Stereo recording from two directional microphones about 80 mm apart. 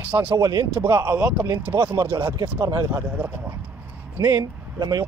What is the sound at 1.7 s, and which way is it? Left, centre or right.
Speech, right.